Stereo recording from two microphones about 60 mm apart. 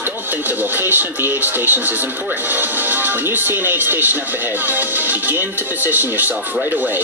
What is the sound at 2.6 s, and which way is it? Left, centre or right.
Speech, right.